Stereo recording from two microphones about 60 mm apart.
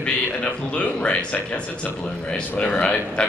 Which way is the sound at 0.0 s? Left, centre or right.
Centre.